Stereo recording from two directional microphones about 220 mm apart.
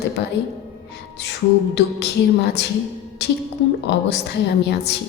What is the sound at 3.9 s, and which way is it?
A woman's voice, 50° left (ahead or behind).